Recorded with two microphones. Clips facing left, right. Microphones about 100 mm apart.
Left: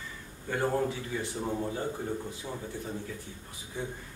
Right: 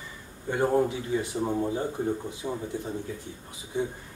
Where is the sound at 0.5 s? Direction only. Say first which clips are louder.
Right 5 dB; 20° right (ahead or behind).